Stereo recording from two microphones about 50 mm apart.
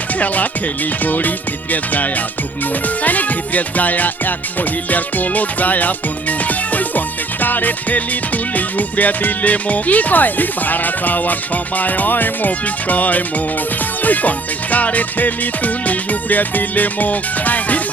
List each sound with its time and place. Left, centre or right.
1.0 s music: left